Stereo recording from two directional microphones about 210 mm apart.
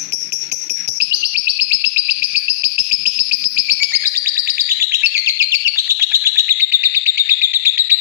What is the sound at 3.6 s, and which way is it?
Bird, 10° right (ahead or behind).